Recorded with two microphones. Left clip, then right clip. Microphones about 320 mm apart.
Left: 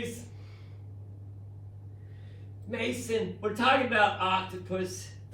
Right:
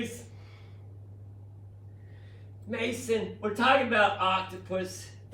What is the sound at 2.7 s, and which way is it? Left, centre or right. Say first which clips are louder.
A man's voice: right 1 dB; right.